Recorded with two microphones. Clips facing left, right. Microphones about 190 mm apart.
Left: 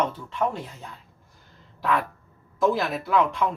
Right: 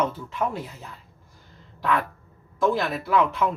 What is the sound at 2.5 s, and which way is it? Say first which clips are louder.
Speech: even; centre (ahead or behind).